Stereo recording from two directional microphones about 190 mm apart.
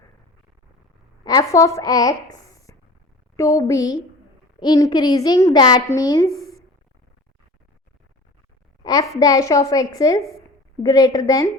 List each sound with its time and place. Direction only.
1.2 s a woman's voice: 20° left (ahead or behind)
8.8 s a woman's voice: 20° left (ahead or behind)